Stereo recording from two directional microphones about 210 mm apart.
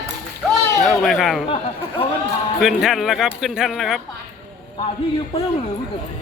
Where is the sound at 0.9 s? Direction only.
Centre (ahead or behind).